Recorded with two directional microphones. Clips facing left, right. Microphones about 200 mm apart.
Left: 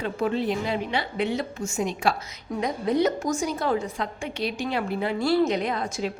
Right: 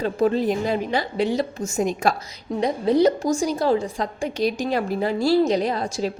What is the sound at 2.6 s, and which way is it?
A woman's voice, 30° right (ahead or behind).